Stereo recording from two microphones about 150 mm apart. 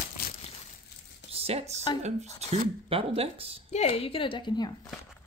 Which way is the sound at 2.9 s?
40° right (ahead or behind).